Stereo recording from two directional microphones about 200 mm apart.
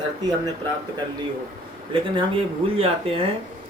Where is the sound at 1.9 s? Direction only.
25° right (ahead or behind).